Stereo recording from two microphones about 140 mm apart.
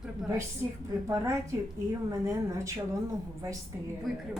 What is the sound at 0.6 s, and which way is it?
A woman's voice, 20° right (ahead or behind).